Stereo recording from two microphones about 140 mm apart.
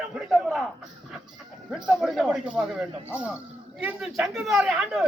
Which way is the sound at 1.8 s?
Centre (ahead or behind).